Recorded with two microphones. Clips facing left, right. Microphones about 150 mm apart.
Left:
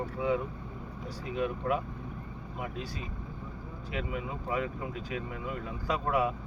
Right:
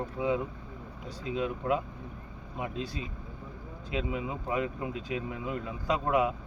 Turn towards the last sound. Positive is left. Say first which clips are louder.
# right 2 dB
turn(degrees=-20)  # may be behind; listen again after turning